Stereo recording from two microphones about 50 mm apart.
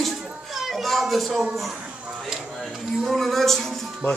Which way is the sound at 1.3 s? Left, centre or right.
Centre.